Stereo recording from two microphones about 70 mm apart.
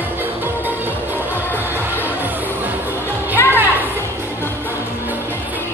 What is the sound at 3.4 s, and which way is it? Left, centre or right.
Music, left.